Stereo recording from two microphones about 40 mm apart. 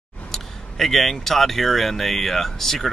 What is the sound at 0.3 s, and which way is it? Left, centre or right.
A man's voice, centre.